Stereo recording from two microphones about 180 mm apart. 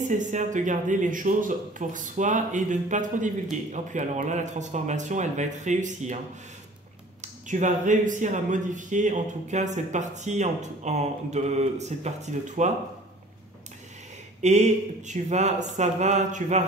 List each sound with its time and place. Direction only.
0.1 s speech: 45° right (ahead or behind)
7.4 s speech: 45° right (ahead or behind)
14.4 s speech: 40° right (ahead or behind)